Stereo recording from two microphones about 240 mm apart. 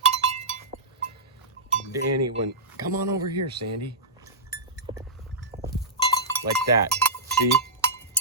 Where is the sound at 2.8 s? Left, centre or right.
Centre.